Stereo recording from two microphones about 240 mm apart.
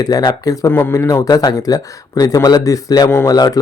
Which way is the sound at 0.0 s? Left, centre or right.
Centre.